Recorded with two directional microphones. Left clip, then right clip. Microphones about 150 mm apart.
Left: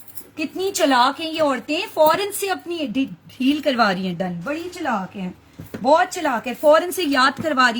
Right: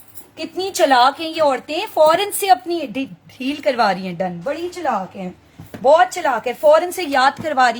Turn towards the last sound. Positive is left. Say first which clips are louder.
# right 2 dB
turn(degrees=-35)  # may be behind; listen again after turning